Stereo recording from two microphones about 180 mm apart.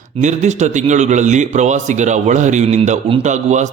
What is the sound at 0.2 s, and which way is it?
A man's voice, 40° right (ahead or behind).